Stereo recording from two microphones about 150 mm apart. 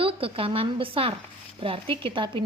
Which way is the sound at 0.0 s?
40° right (ahead or behind).